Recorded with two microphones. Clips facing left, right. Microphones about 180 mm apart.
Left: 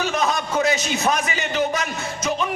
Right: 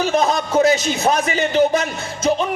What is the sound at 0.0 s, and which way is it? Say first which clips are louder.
A man's voice: right 5 dB; 35° right (ahead or behind).